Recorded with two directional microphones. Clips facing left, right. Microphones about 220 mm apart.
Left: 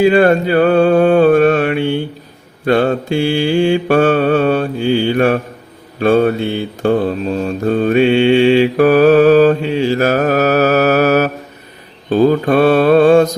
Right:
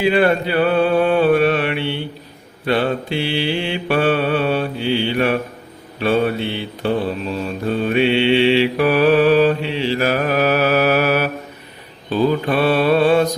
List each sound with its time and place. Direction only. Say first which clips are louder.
0.0 s mantra: left 6 dB; 45° left (ahead or behind)